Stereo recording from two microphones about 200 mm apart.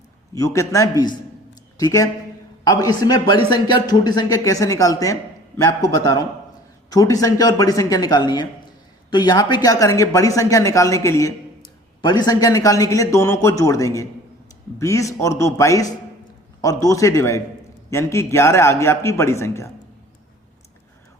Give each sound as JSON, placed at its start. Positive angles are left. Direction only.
{"t": 0.3, "sound": "a man's voice", "side_deg": 15}